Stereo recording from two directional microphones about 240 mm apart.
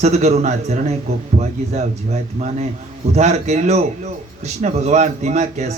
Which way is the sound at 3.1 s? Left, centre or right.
Right.